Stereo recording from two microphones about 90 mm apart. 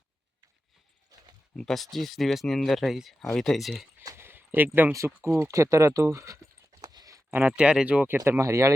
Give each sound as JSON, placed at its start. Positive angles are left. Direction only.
{"t": 1.5, "sound": "speech", "side_deg": 5}
{"t": 4.0, "sound": "a sound", "side_deg": -30}
{"t": 4.9, "sound": "speech", "side_deg": -30}
{"t": 6.8, "sound": "a sound", "side_deg": -45}
{"t": 7.3, "sound": "speech", "side_deg": -20}
{"t": 7.5, "sound": "speech", "side_deg": -10}
{"t": 8.0, "sound": "speech", "side_deg": -25}